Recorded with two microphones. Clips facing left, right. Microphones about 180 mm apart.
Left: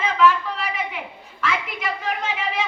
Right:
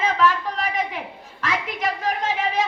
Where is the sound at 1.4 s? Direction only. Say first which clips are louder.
Right 1 dB; 40° right (ahead or behind).